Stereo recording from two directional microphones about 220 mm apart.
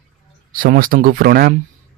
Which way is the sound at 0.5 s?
40° right (ahead or behind).